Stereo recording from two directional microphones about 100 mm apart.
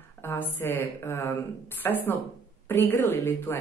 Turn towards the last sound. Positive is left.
turn(degrees=25)  # may be behind; listen again after turning